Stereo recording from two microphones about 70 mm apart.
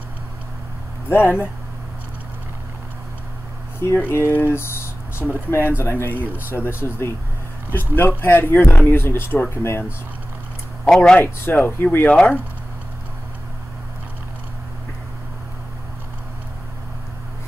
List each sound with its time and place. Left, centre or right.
1.0 s speech: left
4.1 s speech: left
10.9 s speech: centre
11.1 s speech: left
12.1 s speech: centre